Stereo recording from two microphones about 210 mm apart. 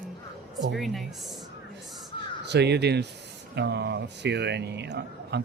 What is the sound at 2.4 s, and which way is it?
Speech, 55° right (ahead or behind).